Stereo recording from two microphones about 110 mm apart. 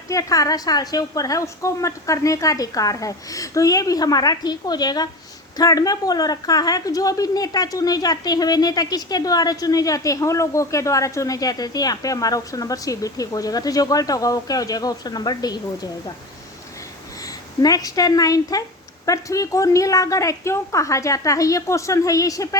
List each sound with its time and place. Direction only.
0.1 s a woman's voice: 30° left (ahead or behind)
17.6 s a woman's voice: 35° left (ahead or behind)